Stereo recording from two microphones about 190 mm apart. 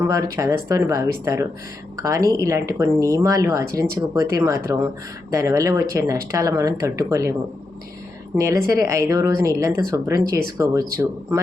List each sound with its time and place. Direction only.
0.1 s speech: 15° right (ahead or behind)
8.4 s speech: 15° right (ahead or behind)